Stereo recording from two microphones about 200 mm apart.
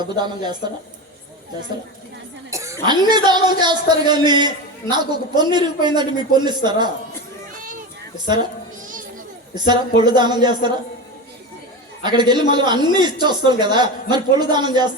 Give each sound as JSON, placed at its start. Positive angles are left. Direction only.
{"t": 0.0, "sound": "speech", "side_deg": -20}
{"t": 2.5, "sound": "speech", "side_deg": -15}
{"t": 9.6, "sound": "speech", "side_deg": -20}
{"t": 12.0, "sound": "speech", "side_deg": -20}